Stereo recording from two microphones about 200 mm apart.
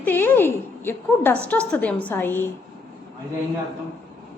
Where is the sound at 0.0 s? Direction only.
10° left (ahead or behind).